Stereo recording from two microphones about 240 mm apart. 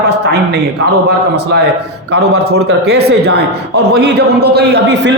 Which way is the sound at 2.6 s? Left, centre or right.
Right.